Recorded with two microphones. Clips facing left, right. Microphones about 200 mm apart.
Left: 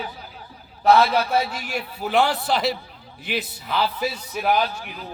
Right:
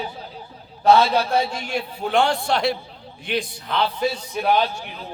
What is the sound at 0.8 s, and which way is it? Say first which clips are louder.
Speech: right 1 dB; 25° right (ahead or behind).